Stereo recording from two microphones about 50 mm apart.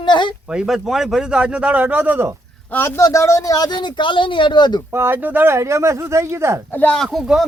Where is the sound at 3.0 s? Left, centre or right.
Left.